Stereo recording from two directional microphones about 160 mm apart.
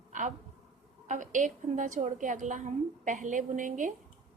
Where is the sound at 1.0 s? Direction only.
50° right (ahead or behind).